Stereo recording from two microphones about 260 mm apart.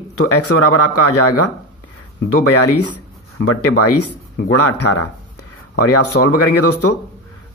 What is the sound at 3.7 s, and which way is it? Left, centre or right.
Speech, left.